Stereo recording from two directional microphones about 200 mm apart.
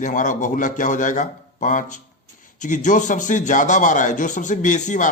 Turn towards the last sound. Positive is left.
turn(degrees=40)  # may be behind; listen again after turning